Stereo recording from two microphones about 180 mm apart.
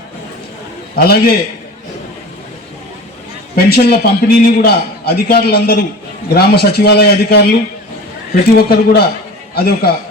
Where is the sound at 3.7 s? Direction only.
60° left (ahead or behind).